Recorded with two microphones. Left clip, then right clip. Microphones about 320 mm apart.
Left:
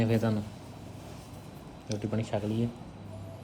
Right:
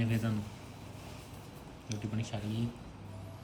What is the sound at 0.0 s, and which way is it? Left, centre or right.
Speech, centre.